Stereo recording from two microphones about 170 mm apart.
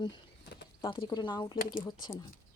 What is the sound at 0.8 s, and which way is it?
Speech, 30° left (ahead or behind).